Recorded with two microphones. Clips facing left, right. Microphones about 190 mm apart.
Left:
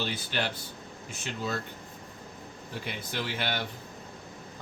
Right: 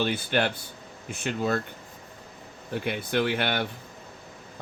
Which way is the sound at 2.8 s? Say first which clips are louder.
Right 10 dB; 60° right (ahead or behind).